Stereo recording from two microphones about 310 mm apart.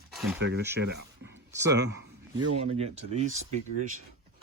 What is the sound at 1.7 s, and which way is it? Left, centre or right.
Speech, right.